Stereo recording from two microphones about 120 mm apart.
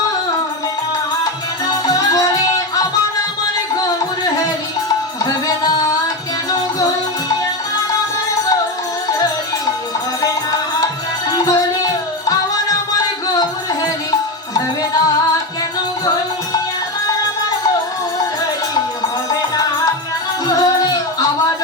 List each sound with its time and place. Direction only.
5.2 s music: 35° left (ahead or behind)
10.2 s music: 30° left (ahead or behind)
20.5 s music: 30° left (ahead or behind)